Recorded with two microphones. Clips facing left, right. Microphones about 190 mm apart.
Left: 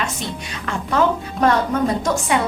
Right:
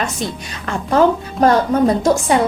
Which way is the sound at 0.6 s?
35° right (ahead or behind).